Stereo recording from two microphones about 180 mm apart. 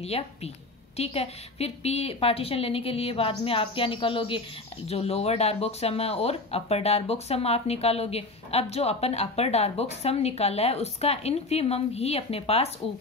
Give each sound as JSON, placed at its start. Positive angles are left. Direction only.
{"t": 0.0, "sound": "speech", "side_deg": 35}